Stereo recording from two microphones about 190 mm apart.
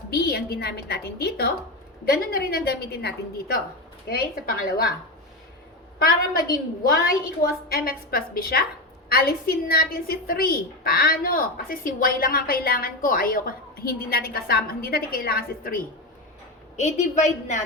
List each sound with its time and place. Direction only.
0.1 s a woman's voice: 55° left (ahead or behind)
6.0 s a woman's voice: 50° left (ahead or behind)